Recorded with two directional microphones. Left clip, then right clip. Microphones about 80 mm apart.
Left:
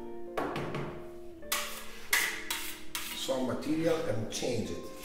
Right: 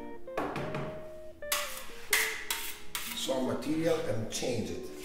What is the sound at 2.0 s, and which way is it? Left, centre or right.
Hammer, centre.